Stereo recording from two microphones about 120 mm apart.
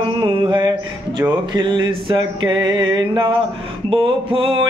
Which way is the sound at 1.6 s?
40° right (ahead or behind).